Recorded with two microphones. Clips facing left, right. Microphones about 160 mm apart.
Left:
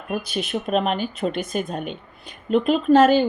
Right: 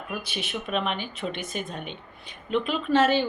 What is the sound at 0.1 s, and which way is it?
Speech, 40° left (ahead or behind).